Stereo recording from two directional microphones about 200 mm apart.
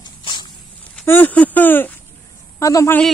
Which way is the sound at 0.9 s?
5° left (ahead or behind).